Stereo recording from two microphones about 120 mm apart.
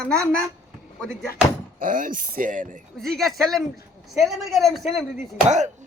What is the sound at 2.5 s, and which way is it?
Speech, 90° right.